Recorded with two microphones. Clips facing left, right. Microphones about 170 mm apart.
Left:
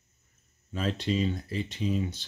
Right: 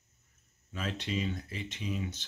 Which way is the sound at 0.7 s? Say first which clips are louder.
Left 7 dB; 35° left (ahead or behind).